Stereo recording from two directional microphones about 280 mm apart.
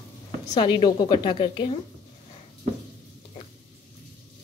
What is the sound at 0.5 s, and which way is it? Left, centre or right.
A woman's voice, centre.